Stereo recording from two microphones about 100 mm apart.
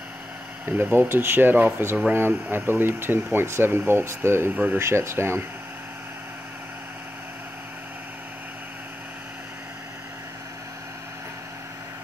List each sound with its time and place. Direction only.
0.7 s speech: 20° right (ahead or behind)